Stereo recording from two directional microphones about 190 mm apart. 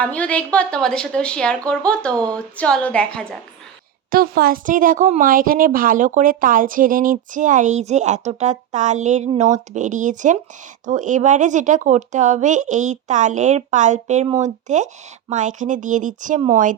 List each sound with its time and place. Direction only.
0.0 s a woman's voice: 5° left (ahead or behind)
4.1 s speech: 50° right (ahead or behind)